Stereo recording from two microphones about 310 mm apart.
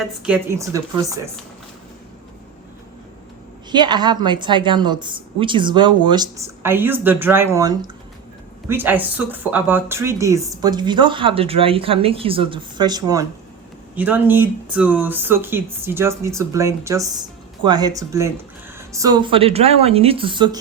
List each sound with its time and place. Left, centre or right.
0.0 s speech: centre
3.7 s speech: centre